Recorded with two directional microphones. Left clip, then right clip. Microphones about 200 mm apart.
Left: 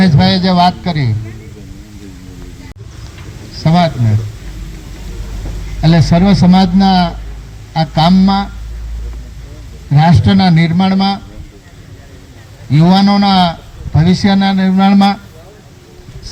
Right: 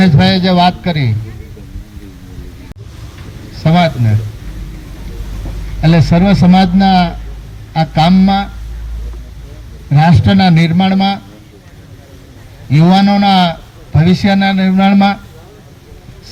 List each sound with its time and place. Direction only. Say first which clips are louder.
0.0 s a man's voice: right 1 dB; 25° right (ahead or behind)
3.6 s a man's voice: right 1 dB; 30° right (ahead or behind)
5.8 s a man's voice: even; 25° right (ahead or behind)
9.9 s a man's voice: even; 25° right (ahead or behind)
12.7 s a man's voice: even; 25° right (ahead or behind)